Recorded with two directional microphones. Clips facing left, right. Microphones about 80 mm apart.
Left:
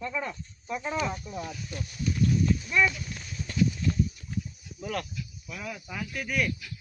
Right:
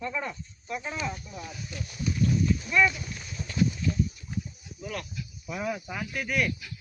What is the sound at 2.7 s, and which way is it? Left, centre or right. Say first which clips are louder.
Speech: right 3 dB; centre.